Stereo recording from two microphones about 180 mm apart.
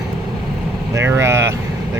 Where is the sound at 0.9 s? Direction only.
15° right (ahead or behind).